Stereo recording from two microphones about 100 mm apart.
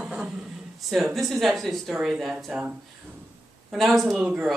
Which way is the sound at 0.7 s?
Centre (ahead or behind).